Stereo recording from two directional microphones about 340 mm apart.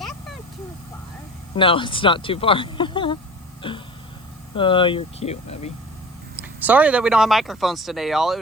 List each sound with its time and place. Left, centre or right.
1.5 s speech: centre
6.3 s speech: centre